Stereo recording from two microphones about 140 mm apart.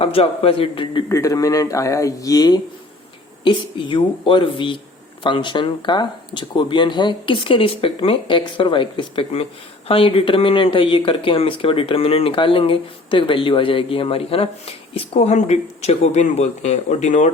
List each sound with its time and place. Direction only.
0.0 s speech: 45° left (ahead or behind)
1.0 s speech: 20° left (ahead or behind); by 17.3 s 55° left (ahead or behind)